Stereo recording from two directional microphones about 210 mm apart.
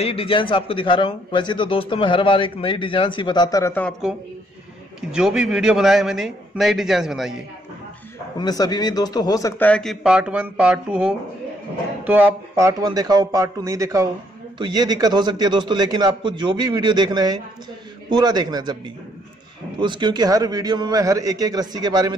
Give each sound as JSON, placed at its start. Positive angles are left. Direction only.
{"t": 0.0, "sound": "a man's voice", "side_deg": 25}
{"t": 5.1, "sound": "a man's voice", "side_deg": -5}
{"t": 8.4, "sound": "a man's voice", "side_deg": 20}
{"t": 19.8, "sound": "a man's voice", "side_deg": -20}